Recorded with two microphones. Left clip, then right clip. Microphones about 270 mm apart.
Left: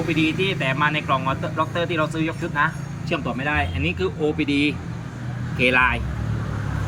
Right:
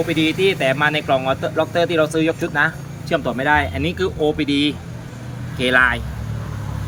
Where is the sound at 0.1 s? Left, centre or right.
Centre.